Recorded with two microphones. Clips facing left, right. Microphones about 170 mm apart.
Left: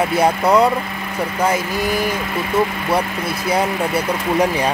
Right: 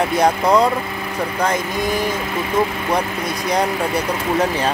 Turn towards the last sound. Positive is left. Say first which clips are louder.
# left 1 dB
turn(degrees=10)  # may be behind; listen again after turning